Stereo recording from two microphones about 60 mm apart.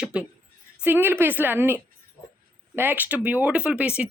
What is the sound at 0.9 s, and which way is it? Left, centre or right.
A woman's voice, right.